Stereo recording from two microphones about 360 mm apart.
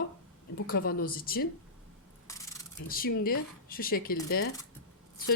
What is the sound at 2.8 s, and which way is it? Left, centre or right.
A woman's voice, left.